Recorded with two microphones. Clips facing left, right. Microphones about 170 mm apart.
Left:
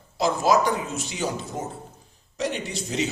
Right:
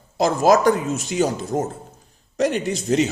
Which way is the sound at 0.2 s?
45° right (ahead or behind).